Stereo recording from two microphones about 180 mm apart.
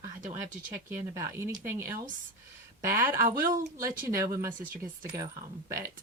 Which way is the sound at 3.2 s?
50° right (ahead or behind).